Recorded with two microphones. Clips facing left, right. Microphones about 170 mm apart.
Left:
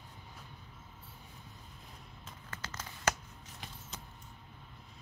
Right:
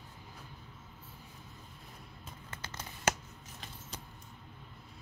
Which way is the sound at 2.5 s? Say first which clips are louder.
Left 1 dB; 25° right (ahead or behind).